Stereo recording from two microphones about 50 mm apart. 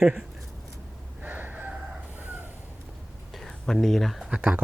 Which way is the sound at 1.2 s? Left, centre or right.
Right.